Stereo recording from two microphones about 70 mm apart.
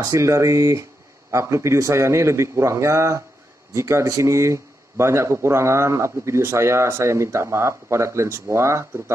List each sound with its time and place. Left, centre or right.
0.0 s a man's voice: right